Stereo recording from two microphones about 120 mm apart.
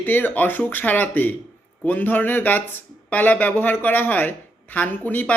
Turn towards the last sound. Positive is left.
turn(degrees=15)  # may be behind; listen again after turning